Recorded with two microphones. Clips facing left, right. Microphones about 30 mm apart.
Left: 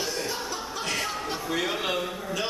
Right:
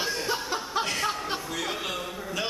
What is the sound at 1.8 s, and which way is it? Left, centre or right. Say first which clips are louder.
Speech: left 4 dB; centre.